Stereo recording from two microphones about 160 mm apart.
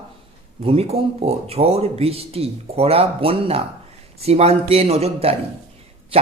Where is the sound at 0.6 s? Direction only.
40° right (ahead or behind).